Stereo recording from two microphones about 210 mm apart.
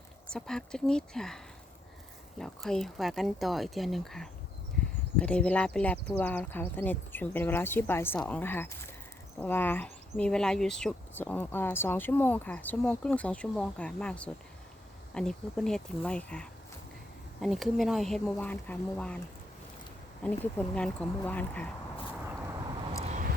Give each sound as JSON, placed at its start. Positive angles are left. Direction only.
{"t": 0.3, "sound": "speech", "side_deg": 5}
{"t": 2.4, "sound": "speech", "side_deg": 0}
{"t": 20.2, "sound": "speech", "side_deg": 5}
{"t": 23.0, "sound": "a sound", "side_deg": -35}